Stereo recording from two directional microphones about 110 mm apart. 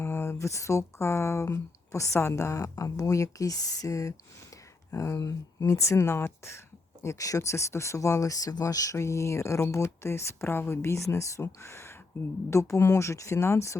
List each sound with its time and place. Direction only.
0.0 s speech: 20° left (ahead or behind)